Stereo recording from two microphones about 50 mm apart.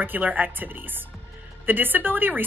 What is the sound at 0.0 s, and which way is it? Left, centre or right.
A woman's voice, right.